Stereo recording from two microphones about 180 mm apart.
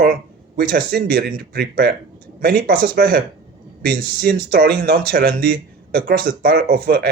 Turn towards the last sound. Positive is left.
turn(degrees=-55)  # may be behind; listen again after turning